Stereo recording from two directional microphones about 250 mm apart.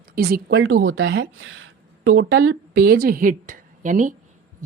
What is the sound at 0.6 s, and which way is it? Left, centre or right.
Speech, right.